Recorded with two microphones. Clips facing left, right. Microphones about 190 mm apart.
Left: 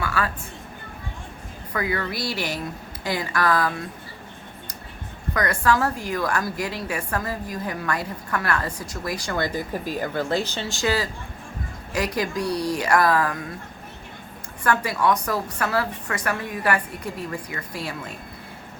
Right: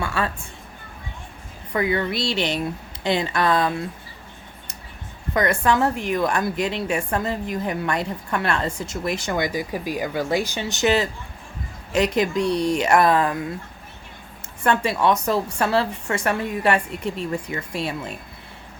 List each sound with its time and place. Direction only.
0.0 s a woman's voice: 25° right (ahead or behind)
1.7 s a woman's voice: 25° right (ahead or behind)
5.3 s a woman's voice: 25° right (ahead or behind)
14.6 s a woman's voice: 25° right (ahead or behind)